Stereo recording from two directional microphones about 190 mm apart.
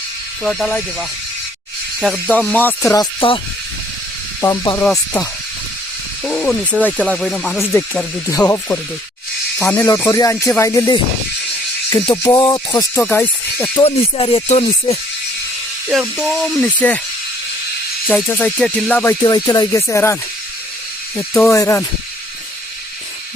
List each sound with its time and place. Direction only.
0.4 s speech: centre (ahead or behind); by 3.4 s 25° left (ahead or behind)
4.4 s speech: 10° left (ahead or behind)
6.2 s speech: 5° left (ahead or behind)
8.3 s speech: 15° left (ahead or behind)
13.7 s music: 30° left (ahead or behind)
15.9 s speech: centre (ahead or behind)
18.3 s speech: 5° left (ahead or behind)
19.2 s speech: 20° left (ahead or behind)
21.2 s speech: 15° left (ahead or behind)